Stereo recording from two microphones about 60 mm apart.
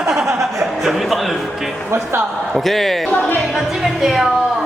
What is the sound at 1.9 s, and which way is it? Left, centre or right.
Speech, right.